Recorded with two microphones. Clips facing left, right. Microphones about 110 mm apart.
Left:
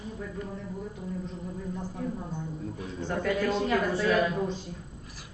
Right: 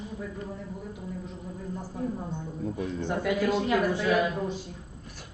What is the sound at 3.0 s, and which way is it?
A woman's voice, 15° right (ahead or behind).